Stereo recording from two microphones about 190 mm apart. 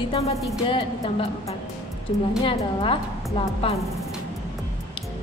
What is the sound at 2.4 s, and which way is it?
A woman's voice, 25° left (ahead or behind).